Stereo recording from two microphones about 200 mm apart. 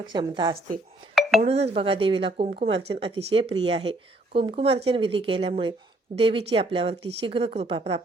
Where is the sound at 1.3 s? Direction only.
30° right (ahead or behind).